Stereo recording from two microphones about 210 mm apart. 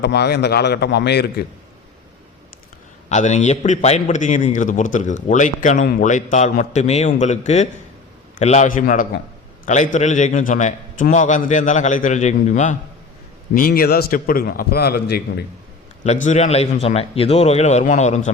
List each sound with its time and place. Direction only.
0.0 s a man's voice: 50° left (ahead or behind)
3.1 s a man's voice: 35° left (ahead or behind)
16.0 s a man's voice: 35° left (ahead or behind)